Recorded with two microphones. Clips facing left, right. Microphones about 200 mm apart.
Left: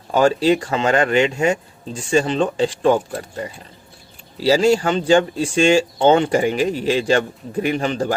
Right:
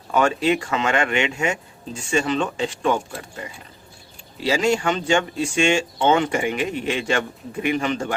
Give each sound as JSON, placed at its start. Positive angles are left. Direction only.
{"t": 0.1, "sound": "speech", "side_deg": 30}
{"t": 4.4, "sound": "speech", "side_deg": 35}